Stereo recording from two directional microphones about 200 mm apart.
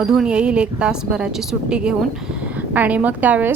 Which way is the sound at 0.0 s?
5° right (ahead or behind).